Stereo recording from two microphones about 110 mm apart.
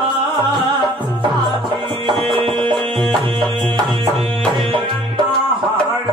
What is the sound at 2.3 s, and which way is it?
Music, 50° right (ahead or behind).